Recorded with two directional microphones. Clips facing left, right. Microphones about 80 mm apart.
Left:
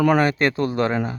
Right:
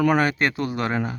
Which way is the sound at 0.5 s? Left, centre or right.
Left.